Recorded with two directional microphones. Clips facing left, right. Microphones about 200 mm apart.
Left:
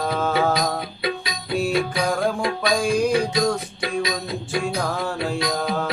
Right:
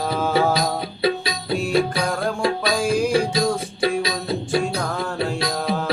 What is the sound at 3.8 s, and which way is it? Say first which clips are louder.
Music: right 3 dB; 30° right (ahead or behind).